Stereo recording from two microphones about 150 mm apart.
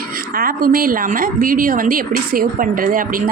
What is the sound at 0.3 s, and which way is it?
A woman's voice, 75° right (ahead or behind).